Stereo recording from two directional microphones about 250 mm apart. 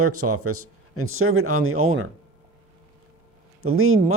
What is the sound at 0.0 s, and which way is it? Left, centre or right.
Speech, right.